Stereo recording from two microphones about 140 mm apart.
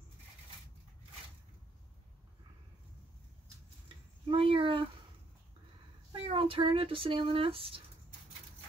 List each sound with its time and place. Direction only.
4.3 s speech: 40° right (ahead or behind)
6.2 s speech: 40° right (ahead or behind)